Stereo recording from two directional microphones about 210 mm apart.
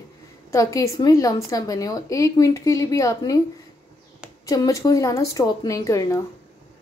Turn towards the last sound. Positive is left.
turn(degrees=15)  # may be behind; listen again after turning